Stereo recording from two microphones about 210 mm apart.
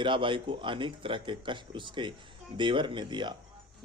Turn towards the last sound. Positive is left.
turn(degrees=-20)  # may be behind; listen again after turning